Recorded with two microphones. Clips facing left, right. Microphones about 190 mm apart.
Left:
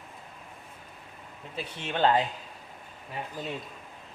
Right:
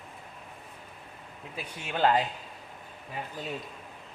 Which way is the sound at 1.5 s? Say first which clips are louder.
Left 2 dB; 10° right (ahead or behind).